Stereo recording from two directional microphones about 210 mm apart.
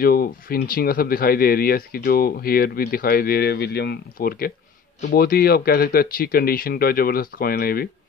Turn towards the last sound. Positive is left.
turn(degrees=45)  # may be behind; listen again after turning